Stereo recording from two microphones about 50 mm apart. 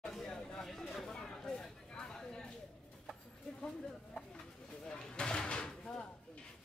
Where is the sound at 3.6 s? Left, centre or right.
Centre.